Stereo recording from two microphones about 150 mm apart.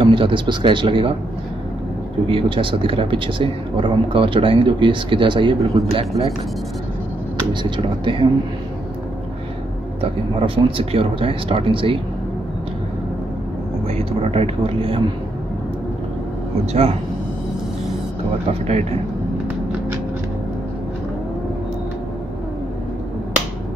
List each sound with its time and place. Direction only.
0.0 s speech: 35° right (ahead or behind)
2.2 s speech: 35° right (ahead or behind)
7.7 s speech: 35° right (ahead or behind)
10.4 s speech: 40° right (ahead or behind)
13.8 s speech: 40° right (ahead or behind)
18.5 s speech: 45° right (ahead or behind)